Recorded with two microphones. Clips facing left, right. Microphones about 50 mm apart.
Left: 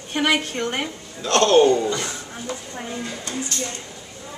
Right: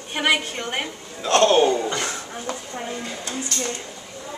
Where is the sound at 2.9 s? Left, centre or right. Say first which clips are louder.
Left 4 dB; centre.